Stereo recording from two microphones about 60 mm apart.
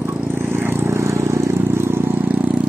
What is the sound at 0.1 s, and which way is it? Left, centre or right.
Vehicle, right.